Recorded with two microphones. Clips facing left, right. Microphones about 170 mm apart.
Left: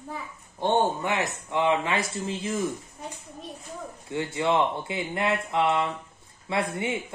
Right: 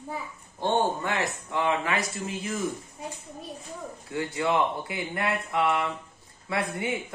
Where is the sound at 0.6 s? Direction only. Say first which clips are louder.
Left 2 dB; 20° left (ahead or behind).